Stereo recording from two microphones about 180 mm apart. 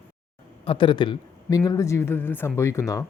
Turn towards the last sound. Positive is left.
turn(degrees=15)  # may be behind; listen again after turning